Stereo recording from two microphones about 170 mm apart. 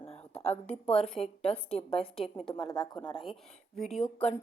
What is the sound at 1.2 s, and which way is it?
A woman's voice, 35° left (ahead or behind).